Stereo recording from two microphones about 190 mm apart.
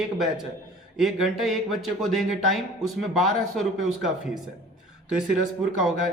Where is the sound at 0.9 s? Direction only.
Centre (ahead or behind).